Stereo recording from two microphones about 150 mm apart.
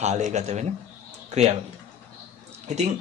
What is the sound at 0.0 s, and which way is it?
Speech, 50° right (ahead or behind).